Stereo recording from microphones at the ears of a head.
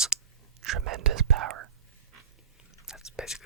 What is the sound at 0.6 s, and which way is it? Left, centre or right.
Whispering, right.